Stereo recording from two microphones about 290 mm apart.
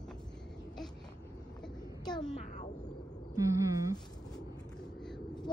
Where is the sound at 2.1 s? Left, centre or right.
Centre.